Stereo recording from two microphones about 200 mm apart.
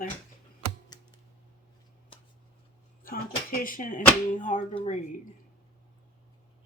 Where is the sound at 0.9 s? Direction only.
20° left (ahead or behind).